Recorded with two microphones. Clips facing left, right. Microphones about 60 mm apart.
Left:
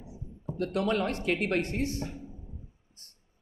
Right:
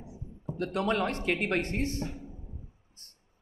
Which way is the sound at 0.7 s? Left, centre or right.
Right.